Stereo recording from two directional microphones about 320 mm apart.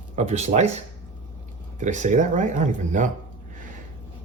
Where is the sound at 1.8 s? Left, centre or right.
Right.